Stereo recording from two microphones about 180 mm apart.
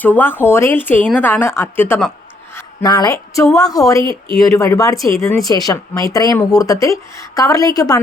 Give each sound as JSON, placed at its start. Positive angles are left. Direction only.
{"t": 0.0, "sound": "speech", "side_deg": 10}
{"t": 2.6, "sound": "a woman's voice", "side_deg": 20}